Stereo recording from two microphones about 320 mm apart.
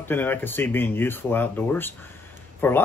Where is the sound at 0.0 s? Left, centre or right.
Centre.